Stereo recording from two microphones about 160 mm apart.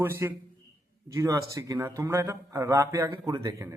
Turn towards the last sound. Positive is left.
turn(degrees=-20)  # may be behind; listen again after turning